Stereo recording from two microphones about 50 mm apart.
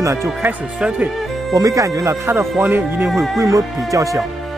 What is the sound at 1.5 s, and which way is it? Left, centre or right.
Speech, right.